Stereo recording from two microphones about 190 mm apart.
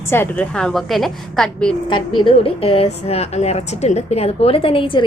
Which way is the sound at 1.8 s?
25° left (ahead or behind).